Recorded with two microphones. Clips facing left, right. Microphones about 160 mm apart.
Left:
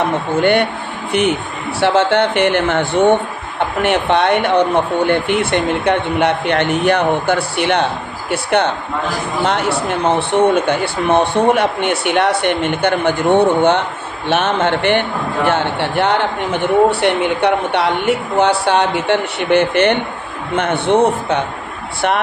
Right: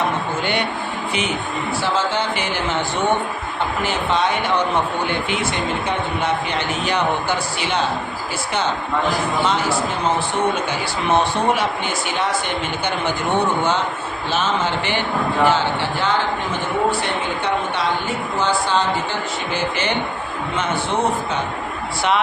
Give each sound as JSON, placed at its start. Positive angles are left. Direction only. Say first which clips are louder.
{"t": 0.4, "sound": "a man's voice", "louder": "left 8 dB", "side_deg": 55}